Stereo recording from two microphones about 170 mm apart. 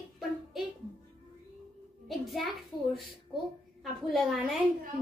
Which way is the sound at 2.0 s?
Centre (ahead or behind).